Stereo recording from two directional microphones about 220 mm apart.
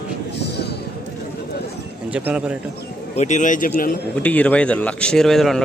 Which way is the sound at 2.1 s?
5° right (ahead or behind).